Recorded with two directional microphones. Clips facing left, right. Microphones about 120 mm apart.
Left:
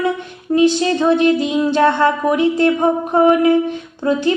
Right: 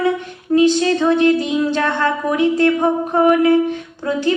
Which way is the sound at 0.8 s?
15° left (ahead or behind).